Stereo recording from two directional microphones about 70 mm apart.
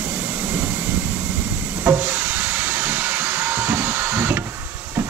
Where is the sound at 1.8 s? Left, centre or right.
Right.